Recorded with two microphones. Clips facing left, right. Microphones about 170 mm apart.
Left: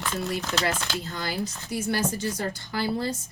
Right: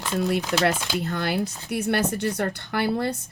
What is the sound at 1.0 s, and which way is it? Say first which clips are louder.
A woman's voice: right 5 dB; 60° right (ahead or behind).